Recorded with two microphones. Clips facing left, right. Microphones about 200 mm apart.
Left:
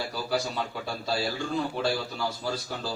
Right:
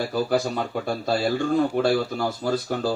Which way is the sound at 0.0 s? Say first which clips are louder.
Right 7 dB; 50° right (ahead or behind).